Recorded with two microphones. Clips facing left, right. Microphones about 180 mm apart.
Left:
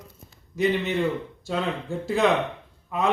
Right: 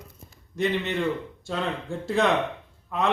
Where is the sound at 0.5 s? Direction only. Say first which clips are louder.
Left 2 dB; centre (ahead or behind).